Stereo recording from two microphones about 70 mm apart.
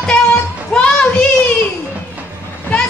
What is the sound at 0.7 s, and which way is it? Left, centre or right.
Child singing, centre.